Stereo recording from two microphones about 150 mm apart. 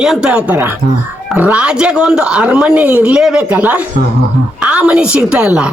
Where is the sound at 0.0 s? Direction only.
5° right (ahead or behind).